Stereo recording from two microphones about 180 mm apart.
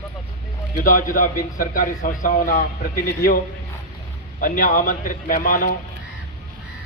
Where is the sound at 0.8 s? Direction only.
50° left (ahead or behind).